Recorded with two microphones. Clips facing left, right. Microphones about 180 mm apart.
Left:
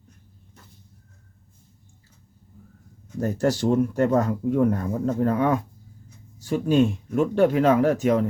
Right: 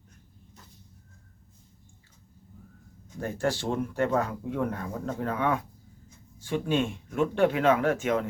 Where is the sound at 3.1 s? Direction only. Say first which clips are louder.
Left 6 dB; 40° left (ahead or behind).